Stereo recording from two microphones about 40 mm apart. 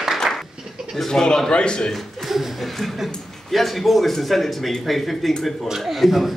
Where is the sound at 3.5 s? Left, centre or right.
Centre.